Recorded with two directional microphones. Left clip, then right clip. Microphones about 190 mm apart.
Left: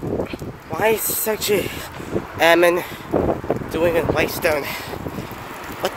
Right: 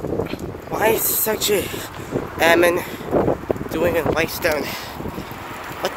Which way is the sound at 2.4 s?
20° left (ahead or behind).